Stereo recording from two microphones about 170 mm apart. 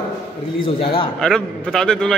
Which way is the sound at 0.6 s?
35° left (ahead or behind).